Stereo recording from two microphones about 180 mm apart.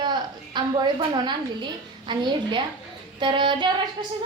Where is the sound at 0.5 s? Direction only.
25° right (ahead or behind).